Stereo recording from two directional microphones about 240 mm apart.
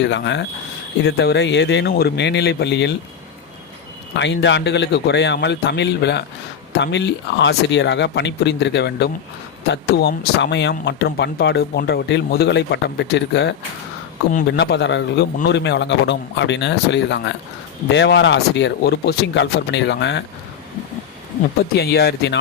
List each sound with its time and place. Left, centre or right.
0.0 s speech: left
4.1 s speech: left
21.8 s speech: left